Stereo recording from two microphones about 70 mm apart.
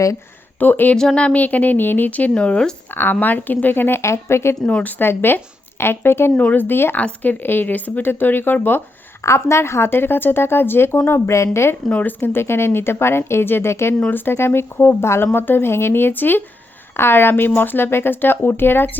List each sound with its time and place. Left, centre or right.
0.6 s speech: left
0.9 s speech: centre
2.9 s speech: left
4.6 s speech: left
5.0 s speech: left
6.3 s speech: left
9.2 s speech: left
11.9 s speech: left